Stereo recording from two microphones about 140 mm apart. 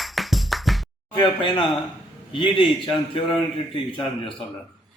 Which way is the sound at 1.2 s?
35° left (ahead or behind).